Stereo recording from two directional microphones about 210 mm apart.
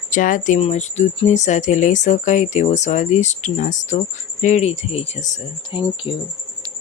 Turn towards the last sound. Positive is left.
turn(degrees=25)  # may be behind; listen again after turning